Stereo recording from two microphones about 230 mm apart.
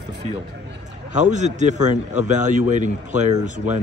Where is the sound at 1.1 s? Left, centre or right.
Right.